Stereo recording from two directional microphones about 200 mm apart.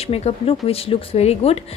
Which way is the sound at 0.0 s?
30° left (ahead or behind).